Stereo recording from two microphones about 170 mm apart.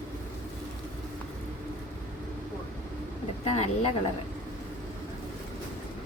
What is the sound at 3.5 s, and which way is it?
Speech, 40° left (ahead or behind).